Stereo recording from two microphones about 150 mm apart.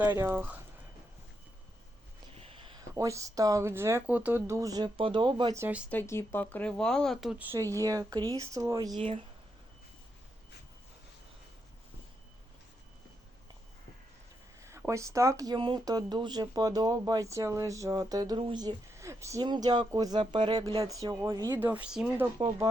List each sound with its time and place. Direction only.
0.0 s speech: 15° right (ahead or behind)
2.4 s a sound: 35° right (ahead or behind)
2.9 s speech: 20° right (ahead or behind)
5.5 s speech: 10° right (ahead or behind)
5.9 s speech: 15° left (ahead or behind); by 7.4 s centre (ahead or behind)
7.8 s speech: 25° right (ahead or behind)
14.7 s speech: 20° right (ahead or behind)
21.6 s speech: 10° right (ahead or behind)